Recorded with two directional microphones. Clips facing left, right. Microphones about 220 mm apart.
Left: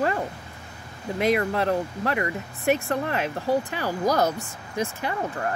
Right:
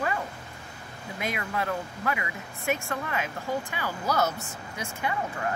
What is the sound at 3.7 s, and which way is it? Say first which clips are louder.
Speech: left 5 dB; 35° left (ahead or behind).